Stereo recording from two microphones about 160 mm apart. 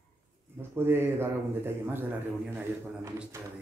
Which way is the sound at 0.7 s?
15° right (ahead or behind).